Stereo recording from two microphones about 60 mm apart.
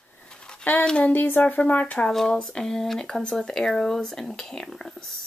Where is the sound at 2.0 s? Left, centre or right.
Centre.